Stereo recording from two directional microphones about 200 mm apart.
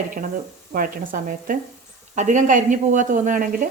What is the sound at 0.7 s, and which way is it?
Speech, 45° right (ahead or behind).